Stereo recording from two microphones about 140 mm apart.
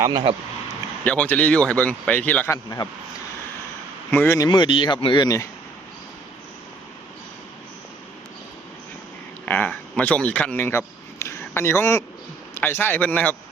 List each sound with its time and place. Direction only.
0.1 s speech: 35° right (ahead or behind)
1.0 s a man's voice: 10° left (ahead or behind)
2.6 s speech: 30° left (ahead or behind)
4.1 s a man's voice: 15° left (ahead or behind)
4.4 s speech: 35° left (ahead or behind)
9.5 s a man's voice: 10° left (ahead or behind)